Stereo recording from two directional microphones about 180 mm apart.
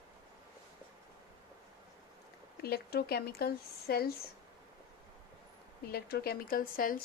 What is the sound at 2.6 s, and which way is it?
Speech, 60° left (ahead or behind).